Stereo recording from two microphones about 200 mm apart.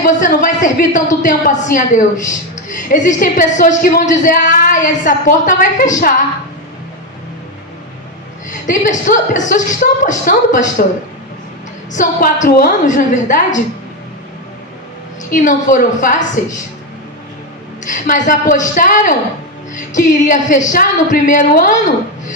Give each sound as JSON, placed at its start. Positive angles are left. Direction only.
{"t": 0.0, "sound": "a woman's voice", "side_deg": 40}
{"t": 8.6, "sound": "a woman's voice", "side_deg": 40}
{"t": 11.9, "sound": "a woman's voice", "side_deg": 40}
{"t": 15.2, "sound": "a woman's voice", "side_deg": 40}
{"t": 17.8, "sound": "a woman's voice", "side_deg": 40}